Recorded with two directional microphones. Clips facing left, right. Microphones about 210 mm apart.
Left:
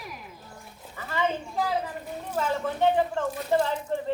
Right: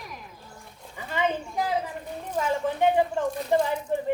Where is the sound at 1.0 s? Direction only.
15° right (ahead or behind).